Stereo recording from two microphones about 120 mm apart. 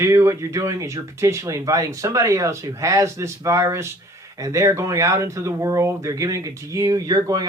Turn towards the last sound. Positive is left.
turn(degrees=-30)  # may be behind; listen again after turning